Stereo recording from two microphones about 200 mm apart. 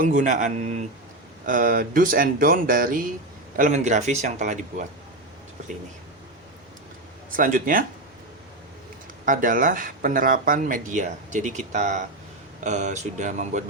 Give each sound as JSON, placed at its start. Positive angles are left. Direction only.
{"t": 0.0, "sound": "speech", "side_deg": -40}
{"t": 7.3, "sound": "speech", "side_deg": -45}
{"t": 9.2, "sound": "speech", "side_deg": -40}